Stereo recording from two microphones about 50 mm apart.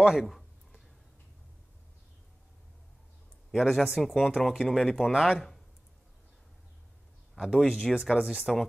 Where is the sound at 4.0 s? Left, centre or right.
Centre.